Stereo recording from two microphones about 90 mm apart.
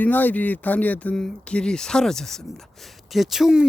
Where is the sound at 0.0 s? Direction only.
20° left (ahead or behind).